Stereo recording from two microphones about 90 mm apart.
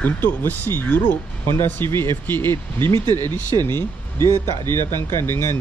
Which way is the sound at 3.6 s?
25° left (ahead or behind).